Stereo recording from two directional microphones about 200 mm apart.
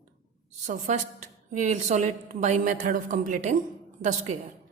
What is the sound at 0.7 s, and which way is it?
A woman's voice, 35° right (ahead or behind).